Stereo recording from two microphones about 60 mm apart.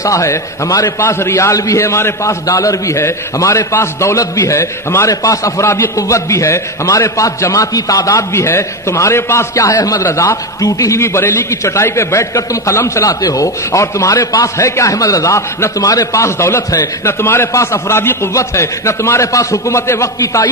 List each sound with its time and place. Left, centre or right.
0.0 s a man's voice: left
0.8 s a man's voice: left
1.8 s a man's voice: left
2.4 s a man's voice: left
8.3 s a man's voice: left
9.6 s a man's voice: left
11.1 s a man's voice: left
17.5 s a man's voice: left
18.3 s a man's voice: left